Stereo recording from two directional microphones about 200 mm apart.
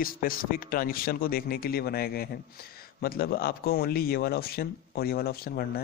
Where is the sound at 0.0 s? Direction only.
45° left (ahead or behind).